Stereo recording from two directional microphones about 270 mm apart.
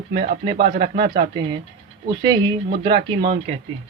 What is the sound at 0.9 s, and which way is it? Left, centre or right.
Speech, centre.